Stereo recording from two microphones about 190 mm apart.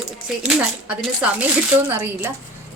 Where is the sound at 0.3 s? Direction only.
5° right (ahead or behind).